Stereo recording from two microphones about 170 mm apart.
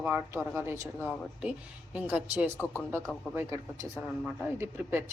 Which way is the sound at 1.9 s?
10° right (ahead or behind).